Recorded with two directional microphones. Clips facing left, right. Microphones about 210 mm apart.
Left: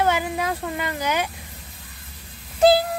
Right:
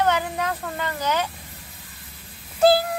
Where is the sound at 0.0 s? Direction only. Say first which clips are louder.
Left 1 dB; 10° left (ahead or behind).